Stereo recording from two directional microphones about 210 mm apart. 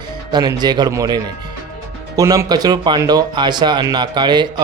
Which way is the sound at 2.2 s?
15° right (ahead or behind).